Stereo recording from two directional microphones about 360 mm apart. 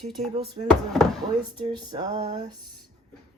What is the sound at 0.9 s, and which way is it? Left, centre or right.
Speech, centre.